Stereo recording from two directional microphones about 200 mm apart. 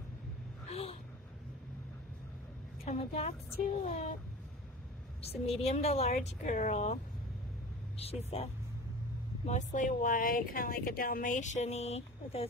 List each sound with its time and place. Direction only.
0.7 s a sound: 30° left (ahead or behind)
2.8 s a woman's voice: 30° left (ahead or behind)
5.2 s speech: 30° left (ahead or behind)
8.0 s speech: 30° left (ahead or behind)
9.5 s speech: 35° left (ahead or behind)